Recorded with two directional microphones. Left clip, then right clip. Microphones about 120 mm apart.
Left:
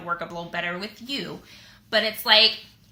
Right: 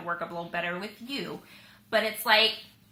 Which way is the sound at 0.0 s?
20° left (ahead or behind).